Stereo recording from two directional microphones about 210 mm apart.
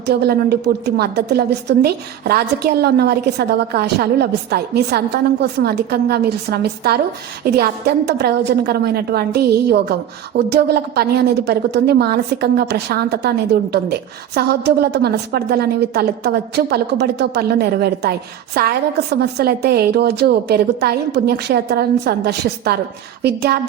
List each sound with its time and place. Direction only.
0.0 s a woman's voice: 50° right (ahead or behind)